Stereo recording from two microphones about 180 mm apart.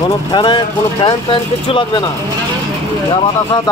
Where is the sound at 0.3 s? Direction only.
25° left (ahead or behind).